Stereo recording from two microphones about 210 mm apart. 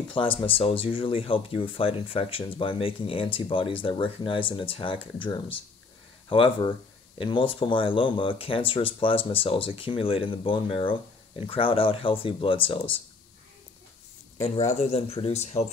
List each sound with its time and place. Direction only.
0.1 s speech: 25° left (ahead or behind)
14.4 s speech: 30° left (ahead or behind)